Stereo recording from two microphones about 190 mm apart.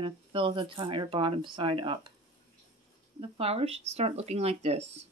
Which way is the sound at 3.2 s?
30° right (ahead or behind).